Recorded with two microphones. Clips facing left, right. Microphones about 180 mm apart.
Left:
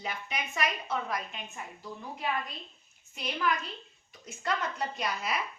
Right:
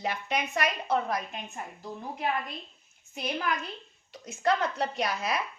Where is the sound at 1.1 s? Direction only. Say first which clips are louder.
Right 4 dB; 45° right (ahead or behind).